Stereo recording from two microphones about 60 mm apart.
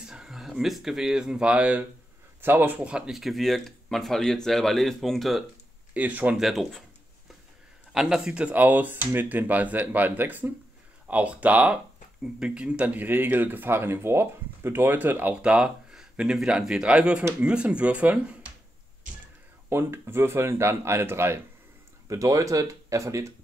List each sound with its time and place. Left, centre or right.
0.0 s speech: centre
2.4 s speech: right
3.1 s speech: centre
5.9 s speech: right
6.3 s speech: centre
7.9 s speech: centre
8.5 s speech: right
15.4 s a sound: centre
16.3 s speech: centre
19.7 s speech: right
22.0 s speech: right